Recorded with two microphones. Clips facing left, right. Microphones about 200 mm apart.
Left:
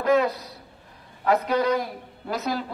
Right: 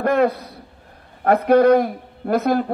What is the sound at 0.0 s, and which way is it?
A man's voice, 55° right (ahead or behind).